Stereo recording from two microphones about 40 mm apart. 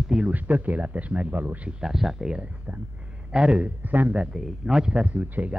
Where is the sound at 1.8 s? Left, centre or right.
Centre.